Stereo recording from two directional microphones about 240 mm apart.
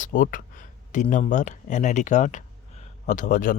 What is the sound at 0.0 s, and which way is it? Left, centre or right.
Speech, left.